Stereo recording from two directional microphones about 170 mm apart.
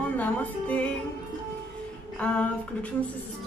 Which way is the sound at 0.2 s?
10° left (ahead or behind).